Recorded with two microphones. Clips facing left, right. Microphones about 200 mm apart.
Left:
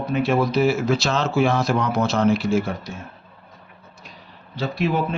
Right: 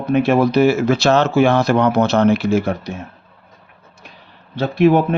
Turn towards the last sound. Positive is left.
turn(degrees=-60)  # may be behind; listen again after turning